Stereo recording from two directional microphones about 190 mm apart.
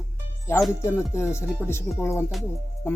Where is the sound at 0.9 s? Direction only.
15° left (ahead or behind).